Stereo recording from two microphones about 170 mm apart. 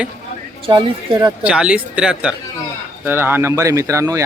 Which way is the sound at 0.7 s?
25° right (ahead or behind).